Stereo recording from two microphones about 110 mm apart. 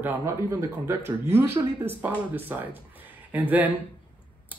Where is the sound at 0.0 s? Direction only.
25° right (ahead or behind).